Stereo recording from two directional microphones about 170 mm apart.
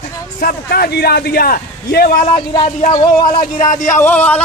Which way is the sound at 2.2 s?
30° left (ahead or behind).